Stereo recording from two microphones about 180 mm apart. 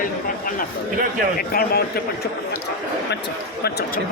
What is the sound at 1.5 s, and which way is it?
Speech, 55° left (ahead or behind).